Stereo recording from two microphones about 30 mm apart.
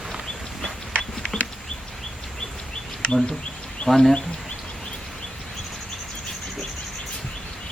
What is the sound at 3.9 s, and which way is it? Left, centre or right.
Speech, centre.